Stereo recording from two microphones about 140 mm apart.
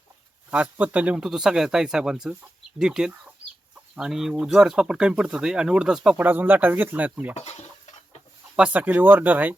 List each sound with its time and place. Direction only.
0.5 s speech: 10° right (ahead or behind)
7.3 s stir: 50° left (ahead or behind)
8.5 s speech: 10° right (ahead or behind)